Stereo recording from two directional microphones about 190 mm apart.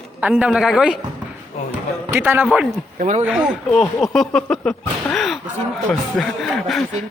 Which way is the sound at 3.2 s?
5° right (ahead or behind).